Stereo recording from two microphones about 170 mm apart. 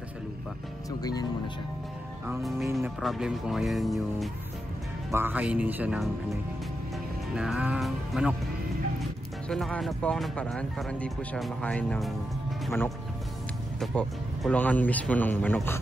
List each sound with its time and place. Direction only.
0.8 s speech: 20° left (ahead or behind)
2.4 s speech: centre (ahead or behind)
5.1 s speech: 10° right (ahead or behind)
7.3 s speech: 5° right (ahead or behind)
9.5 s speech: centre (ahead or behind)
13.7 s speech: 5° left (ahead or behind)